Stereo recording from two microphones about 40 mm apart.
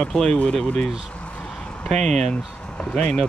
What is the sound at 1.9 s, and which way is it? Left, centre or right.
Speech, centre.